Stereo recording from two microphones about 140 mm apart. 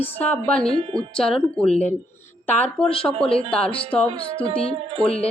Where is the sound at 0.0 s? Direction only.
10° left (ahead or behind).